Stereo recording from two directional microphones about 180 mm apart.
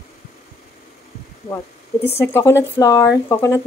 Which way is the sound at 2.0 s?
15° left (ahead or behind).